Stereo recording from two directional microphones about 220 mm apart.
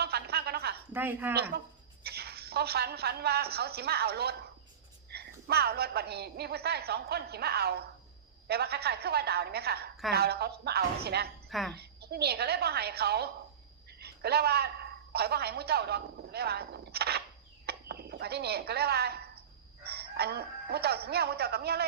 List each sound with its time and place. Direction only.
0.0 s a sound: 45° right (ahead or behind)
0.9 s speech: 10° right (ahead or behind)
1.4 s a woman's voice: 45° right (ahead or behind)
11.4 s a woman's voice: centre (ahead or behind)
11.7 s a woman's voice: 45° right (ahead or behind)